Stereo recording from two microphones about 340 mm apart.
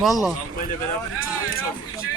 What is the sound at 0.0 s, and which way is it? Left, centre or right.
Speech, centre.